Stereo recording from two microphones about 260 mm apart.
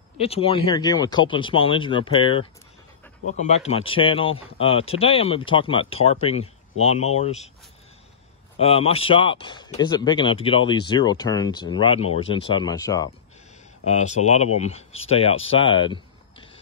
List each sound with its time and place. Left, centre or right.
0.2 s speech: left
8.5 s speech: left
13.8 s speech: left